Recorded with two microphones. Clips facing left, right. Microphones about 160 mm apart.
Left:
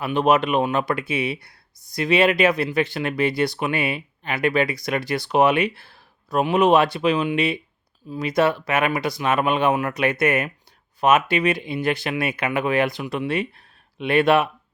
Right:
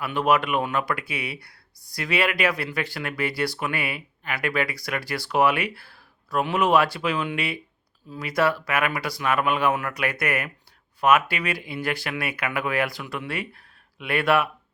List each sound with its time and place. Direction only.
0.0 s speech: 20° left (ahead or behind)